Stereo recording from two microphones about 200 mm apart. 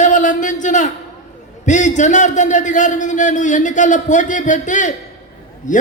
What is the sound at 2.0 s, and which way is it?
A man's voice, 40° left (ahead or behind).